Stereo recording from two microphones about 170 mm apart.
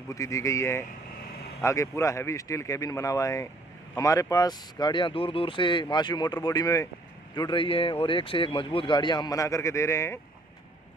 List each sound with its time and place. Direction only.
0.1 s speech: 20° left (ahead or behind)